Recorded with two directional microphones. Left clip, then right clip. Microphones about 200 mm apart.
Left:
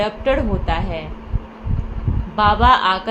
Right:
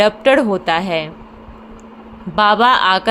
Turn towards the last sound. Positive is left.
turn(degrees=-55)  # may be behind; listen again after turning